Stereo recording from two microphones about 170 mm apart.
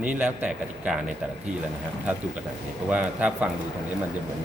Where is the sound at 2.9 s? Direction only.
10° right (ahead or behind).